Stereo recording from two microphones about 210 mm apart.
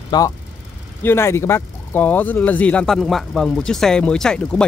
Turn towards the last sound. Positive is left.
turn(degrees=5)  # may be behind; listen again after turning